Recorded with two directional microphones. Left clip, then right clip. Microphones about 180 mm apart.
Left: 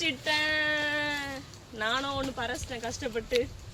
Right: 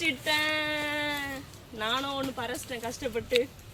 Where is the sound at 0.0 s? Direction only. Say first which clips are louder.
Right 1 dB; 15° right (ahead or behind).